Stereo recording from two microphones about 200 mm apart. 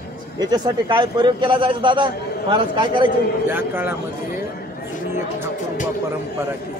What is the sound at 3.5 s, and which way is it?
Speech, 10° right (ahead or behind).